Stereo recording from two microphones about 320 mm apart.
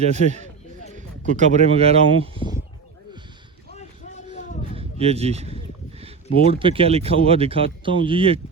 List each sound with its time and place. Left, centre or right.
0.0 s a man's voice: right
4.3 s a sound: left
4.8 s speech: centre